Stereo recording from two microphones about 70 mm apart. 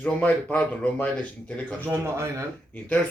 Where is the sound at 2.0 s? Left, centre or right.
Right.